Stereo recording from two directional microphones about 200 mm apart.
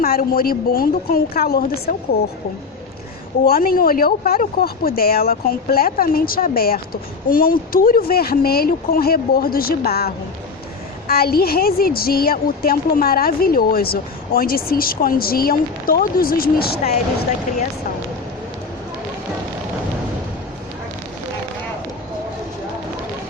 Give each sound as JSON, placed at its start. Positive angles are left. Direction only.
{"t": 0.0, "sound": "speech", "side_deg": 45}
{"t": 3.4, "sound": "speech", "side_deg": 45}
{"t": 11.1, "sound": "speech", "side_deg": 50}